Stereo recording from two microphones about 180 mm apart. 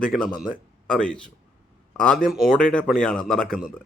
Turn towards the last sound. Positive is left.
turn(degrees=5)  # may be behind; listen again after turning